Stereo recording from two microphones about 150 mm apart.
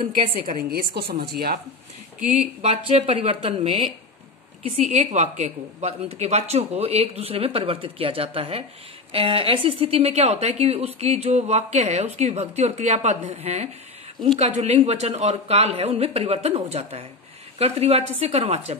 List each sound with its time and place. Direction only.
0.3 s a woman's voice: 90° right
2.3 s speech: 45° right (ahead or behind)
4.6 s a woman's voice: 55° right (ahead or behind)